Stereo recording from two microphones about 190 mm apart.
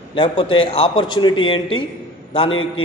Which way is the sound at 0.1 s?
25° left (ahead or behind).